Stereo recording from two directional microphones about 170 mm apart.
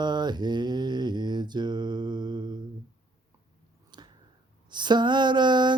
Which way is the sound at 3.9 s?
25° right (ahead or behind).